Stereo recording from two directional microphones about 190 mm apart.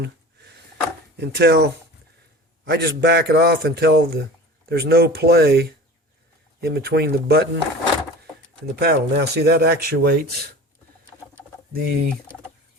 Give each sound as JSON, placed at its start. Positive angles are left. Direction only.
{"t": 1.1, "sound": "speech", "side_deg": -60}
{"t": 2.6, "sound": "speech", "side_deg": -60}
{"t": 8.7, "sound": "speech", "side_deg": -60}
{"t": 11.7, "sound": "fowl", "side_deg": -50}